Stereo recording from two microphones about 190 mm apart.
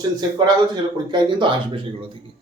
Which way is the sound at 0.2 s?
20° right (ahead or behind).